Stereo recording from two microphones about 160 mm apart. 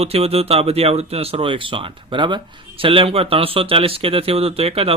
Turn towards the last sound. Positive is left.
turn(degrees=-35)  # may be behind; listen again after turning